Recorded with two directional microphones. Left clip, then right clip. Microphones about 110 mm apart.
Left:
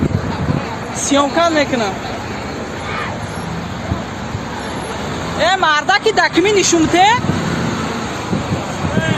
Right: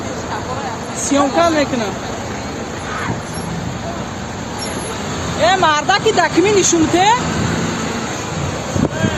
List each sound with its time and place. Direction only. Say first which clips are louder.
1.1 s speech: even; 10° left (ahead or behind)
5.4 s speech: even; 15° left (ahead or behind)
6.1 s speech: even; 25° left (ahead or behind)
6.4 s speech: even; 15° left (ahead or behind)